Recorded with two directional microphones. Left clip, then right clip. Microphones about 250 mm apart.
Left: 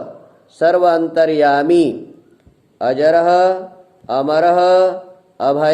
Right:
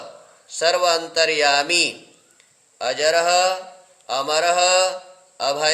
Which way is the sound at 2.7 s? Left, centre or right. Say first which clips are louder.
Left 6 dB; right.